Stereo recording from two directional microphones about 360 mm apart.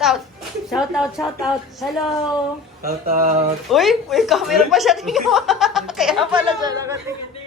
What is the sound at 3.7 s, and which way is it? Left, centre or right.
A woman's voice, centre.